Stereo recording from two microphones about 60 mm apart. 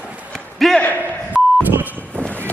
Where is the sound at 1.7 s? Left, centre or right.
Right.